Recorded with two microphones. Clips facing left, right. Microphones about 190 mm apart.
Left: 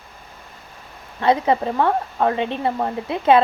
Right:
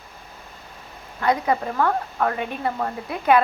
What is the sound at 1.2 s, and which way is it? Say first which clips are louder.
A woman's voice: left 4 dB; 25° left (ahead or behind).